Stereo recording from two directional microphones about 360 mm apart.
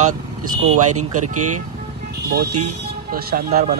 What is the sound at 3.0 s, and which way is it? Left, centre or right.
Speech, right.